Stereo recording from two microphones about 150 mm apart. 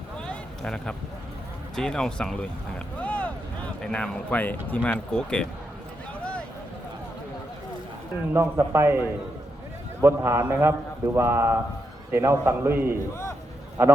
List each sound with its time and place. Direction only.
0.2 s a sound: 5° left (ahead or behind)
1.7 s speech: 5° left (ahead or behind)
8.3 s a man's voice: 15° right (ahead or behind)